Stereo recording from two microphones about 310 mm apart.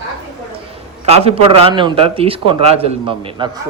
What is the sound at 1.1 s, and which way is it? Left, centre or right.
A man's voice, centre.